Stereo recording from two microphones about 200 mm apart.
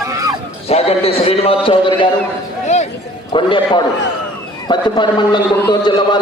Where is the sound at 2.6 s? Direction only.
35° left (ahead or behind).